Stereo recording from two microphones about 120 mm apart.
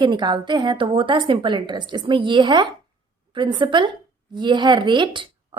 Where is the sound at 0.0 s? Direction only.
40° right (ahead or behind).